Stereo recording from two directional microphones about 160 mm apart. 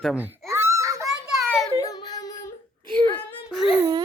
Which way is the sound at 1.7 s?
25° left (ahead or behind).